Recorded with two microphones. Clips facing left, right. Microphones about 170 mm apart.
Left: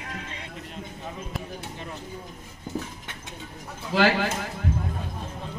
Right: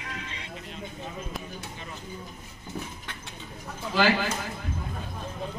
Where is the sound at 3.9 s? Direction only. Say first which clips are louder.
Left 2 dB; 70° left (ahead or behind).